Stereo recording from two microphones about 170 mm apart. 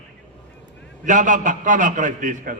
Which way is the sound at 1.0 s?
50° right (ahead or behind).